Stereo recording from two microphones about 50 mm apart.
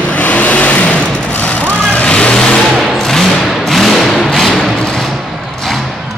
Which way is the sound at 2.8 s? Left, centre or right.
Centre.